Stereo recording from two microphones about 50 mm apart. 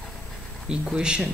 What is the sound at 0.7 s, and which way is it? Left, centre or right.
Speech, centre.